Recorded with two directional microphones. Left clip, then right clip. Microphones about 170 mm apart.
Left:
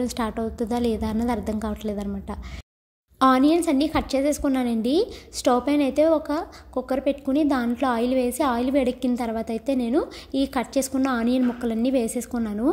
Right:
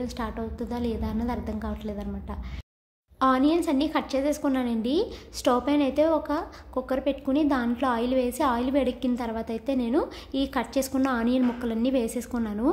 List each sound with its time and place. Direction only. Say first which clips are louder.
0.0 s a woman's voice: left 6 dB; 35° left (ahead or behind); by 12.6 s 15° left (ahead or behind)